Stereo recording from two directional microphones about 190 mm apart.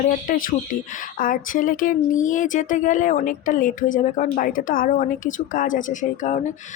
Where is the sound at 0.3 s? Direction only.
45° left (ahead or behind).